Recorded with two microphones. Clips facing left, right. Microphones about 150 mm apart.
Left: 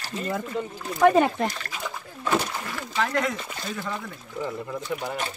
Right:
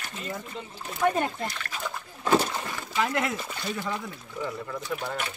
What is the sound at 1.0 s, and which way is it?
Speech, 90° left.